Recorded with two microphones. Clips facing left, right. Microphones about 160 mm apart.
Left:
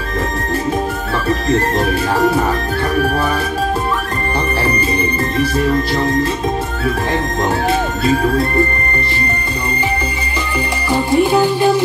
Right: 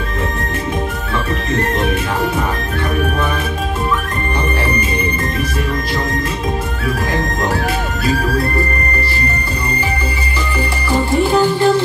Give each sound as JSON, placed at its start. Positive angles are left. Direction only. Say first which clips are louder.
{"t": 5.4, "sound": "speech", "louder": "left 5 dB", "side_deg": 30}
{"t": 10.9, "sound": "music", "louder": "left 1 dB", "side_deg": 15}